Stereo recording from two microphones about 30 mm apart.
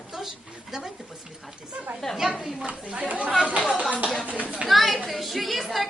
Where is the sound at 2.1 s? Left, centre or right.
Centre.